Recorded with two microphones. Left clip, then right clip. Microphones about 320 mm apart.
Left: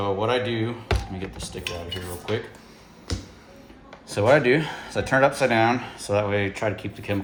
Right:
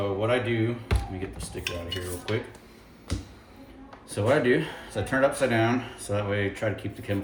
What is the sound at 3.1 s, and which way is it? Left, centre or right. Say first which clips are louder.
Music: left 3 dB; left.